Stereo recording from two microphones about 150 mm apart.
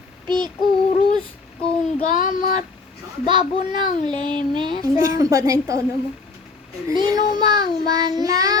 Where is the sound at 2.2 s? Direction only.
65° left (ahead or behind).